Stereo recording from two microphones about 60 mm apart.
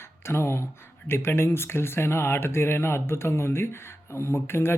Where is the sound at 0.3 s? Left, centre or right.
Left.